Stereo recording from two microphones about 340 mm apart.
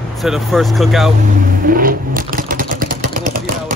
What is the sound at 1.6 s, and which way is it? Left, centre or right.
Vehicle, right.